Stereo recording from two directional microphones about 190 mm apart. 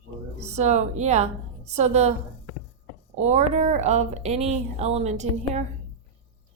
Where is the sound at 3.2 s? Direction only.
35° right (ahead or behind).